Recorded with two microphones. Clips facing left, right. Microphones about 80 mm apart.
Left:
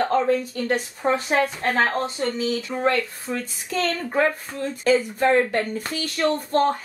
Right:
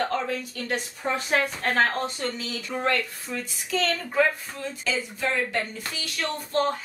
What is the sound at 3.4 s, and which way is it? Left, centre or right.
Speech, left.